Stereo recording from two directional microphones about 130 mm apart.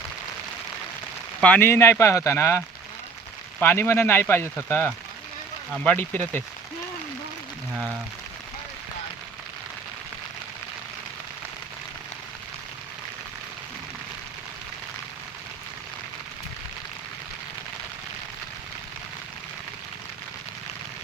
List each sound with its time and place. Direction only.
1.4 s speech: 10° left (ahead or behind)
5.7 s speech: 10° left (ahead or behind)